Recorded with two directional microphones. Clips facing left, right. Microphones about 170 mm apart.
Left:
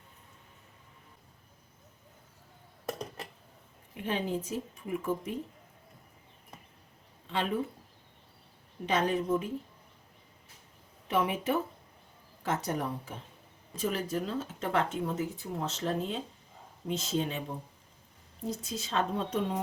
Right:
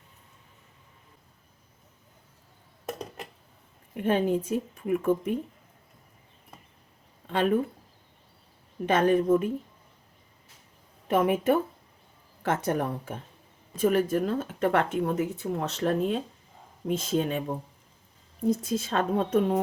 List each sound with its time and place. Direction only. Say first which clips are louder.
3.9 s speech: right 8 dB; 50° right (ahead or behind)
7.3 s speech: right 7 dB; 50° right (ahead or behind)
8.9 s a woman's voice: right 7 dB; 55° right (ahead or behind)
11.1 s a woman's voice: right 6 dB; 50° right (ahead or behind)